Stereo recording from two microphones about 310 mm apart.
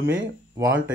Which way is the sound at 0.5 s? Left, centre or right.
Centre.